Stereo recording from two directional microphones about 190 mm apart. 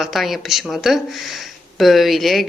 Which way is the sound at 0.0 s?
Centre (ahead or behind).